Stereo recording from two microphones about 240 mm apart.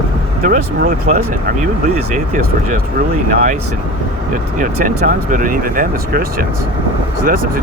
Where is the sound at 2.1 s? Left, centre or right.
Right.